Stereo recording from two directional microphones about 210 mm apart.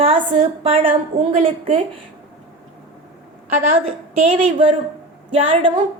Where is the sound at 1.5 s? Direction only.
25° right (ahead or behind).